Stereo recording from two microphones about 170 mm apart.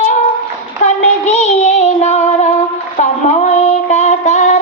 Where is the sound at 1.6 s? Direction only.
40° left (ahead or behind).